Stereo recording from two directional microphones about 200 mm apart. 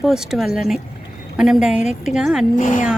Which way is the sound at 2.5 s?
40° left (ahead or behind).